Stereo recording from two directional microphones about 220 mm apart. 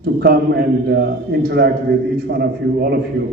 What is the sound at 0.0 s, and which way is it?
A man's voice, 45° right (ahead or behind).